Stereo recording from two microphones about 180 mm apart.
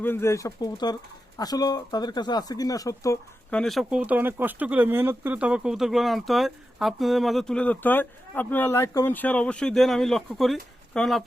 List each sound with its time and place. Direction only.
0.0 s speech: 15° left (ahead or behind)
3.5 s speech: centre (ahead or behind)